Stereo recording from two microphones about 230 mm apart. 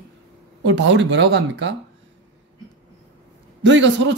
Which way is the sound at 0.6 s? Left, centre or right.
Right.